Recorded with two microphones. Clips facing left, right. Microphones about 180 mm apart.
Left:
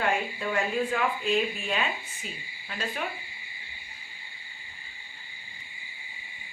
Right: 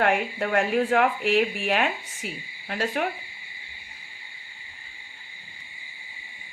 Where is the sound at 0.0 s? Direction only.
70° right (ahead or behind).